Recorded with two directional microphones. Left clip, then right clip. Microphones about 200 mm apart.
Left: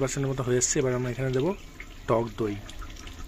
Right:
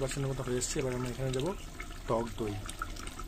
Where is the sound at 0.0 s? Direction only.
25° left (ahead or behind).